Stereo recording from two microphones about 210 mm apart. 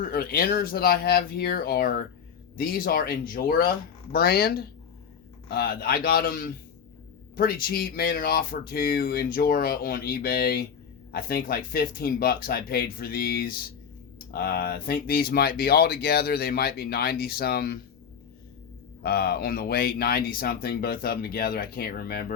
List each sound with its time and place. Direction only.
0.0 s speech: 45° left (ahead or behind)
19.0 s speech: 50° left (ahead or behind)